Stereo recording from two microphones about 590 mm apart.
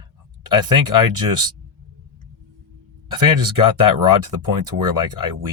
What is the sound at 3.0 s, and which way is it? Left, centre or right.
Speech, right.